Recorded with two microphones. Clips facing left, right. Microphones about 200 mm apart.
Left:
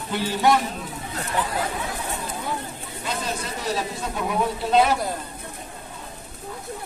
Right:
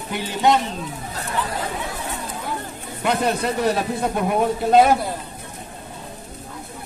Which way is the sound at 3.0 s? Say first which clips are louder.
Right 9 dB; 65° right (ahead or behind).